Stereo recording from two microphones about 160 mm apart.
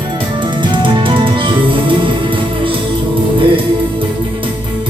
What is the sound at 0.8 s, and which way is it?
Music, 30° right (ahead or behind).